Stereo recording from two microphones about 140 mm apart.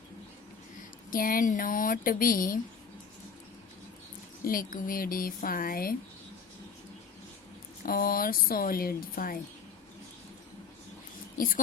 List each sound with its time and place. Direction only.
0.8 s speech: 85° left
4.4 s a woman's voice: 90° left
7.9 s a woman's voice: 90° left
11.3 s speech: 80° left